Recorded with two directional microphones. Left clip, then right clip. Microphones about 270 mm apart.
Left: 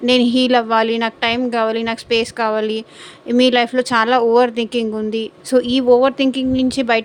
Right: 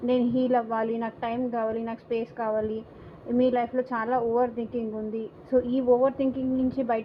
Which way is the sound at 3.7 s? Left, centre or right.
Left.